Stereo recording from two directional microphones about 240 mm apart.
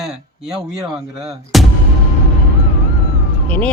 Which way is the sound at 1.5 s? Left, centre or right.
Centre.